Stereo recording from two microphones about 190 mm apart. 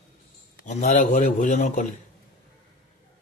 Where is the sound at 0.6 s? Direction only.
40° left (ahead or behind).